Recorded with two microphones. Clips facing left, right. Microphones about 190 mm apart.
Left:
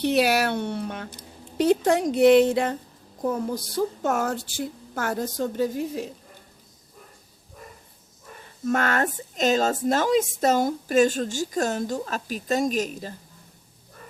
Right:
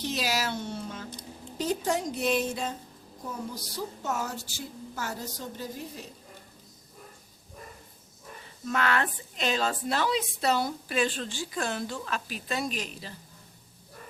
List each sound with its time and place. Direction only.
0.0 s a woman's voice: 60° left (ahead or behind)
3.2 s speech: 50° left (ahead or behind)
8.6 s speech: 45° left (ahead or behind)